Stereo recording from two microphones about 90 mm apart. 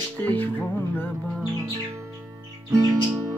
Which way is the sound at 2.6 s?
40° right (ahead or behind).